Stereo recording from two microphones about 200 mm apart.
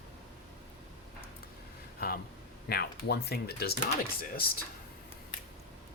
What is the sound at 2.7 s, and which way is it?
Speech, 55° left (ahead or behind).